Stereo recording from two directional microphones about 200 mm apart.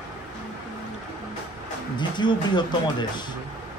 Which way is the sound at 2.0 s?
20° left (ahead or behind).